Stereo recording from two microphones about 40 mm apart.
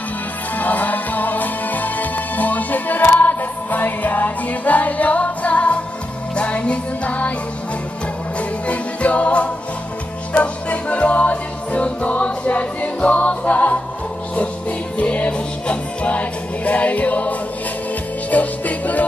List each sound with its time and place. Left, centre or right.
0.6 s music: left
8.4 s music: left
15.0 s music: left